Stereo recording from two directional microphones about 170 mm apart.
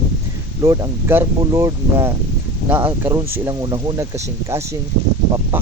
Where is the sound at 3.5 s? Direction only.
25° right (ahead or behind).